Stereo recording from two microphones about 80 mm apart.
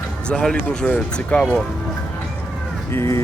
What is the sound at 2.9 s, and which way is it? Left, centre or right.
Speech, left.